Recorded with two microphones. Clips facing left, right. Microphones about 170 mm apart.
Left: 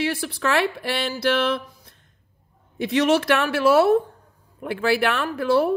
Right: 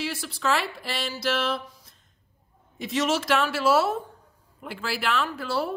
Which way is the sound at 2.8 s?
60° left (ahead or behind).